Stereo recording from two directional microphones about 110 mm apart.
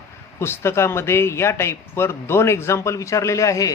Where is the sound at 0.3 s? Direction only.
25° left (ahead or behind).